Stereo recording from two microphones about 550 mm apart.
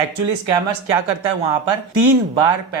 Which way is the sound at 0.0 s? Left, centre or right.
Right.